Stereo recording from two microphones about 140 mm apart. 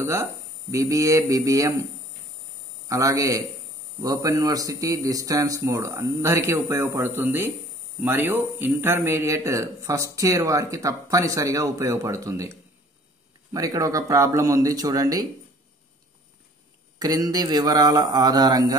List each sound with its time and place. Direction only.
0.0 s a man's voice: 20° right (ahead or behind)
2.9 s a man's voice: 25° right (ahead or behind)
17.0 s a man's voice: 25° right (ahead or behind)